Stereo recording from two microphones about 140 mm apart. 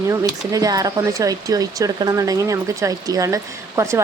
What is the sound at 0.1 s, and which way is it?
Speech, 25° right (ahead or behind).